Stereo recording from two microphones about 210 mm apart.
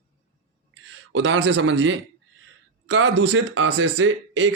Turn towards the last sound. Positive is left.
turn(degrees=-60)  # may be behind; listen again after turning